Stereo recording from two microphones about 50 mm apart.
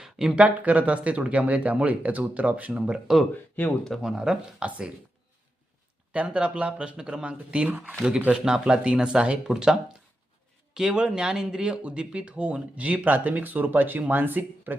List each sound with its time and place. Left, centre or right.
0.0 s a sound: centre
0.3 s speech: right
3.6 s speech: left
4.0 s speech: centre
6.1 s speech: right
7.7 s speech: right
8.3 s speech: centre
10.8 s speech: centre; by 14.8 s right